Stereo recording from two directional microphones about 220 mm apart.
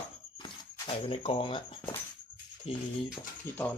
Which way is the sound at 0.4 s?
25° left (ahead or behind).